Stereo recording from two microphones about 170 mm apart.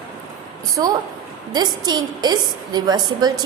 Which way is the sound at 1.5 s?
25° right (ahead or behind).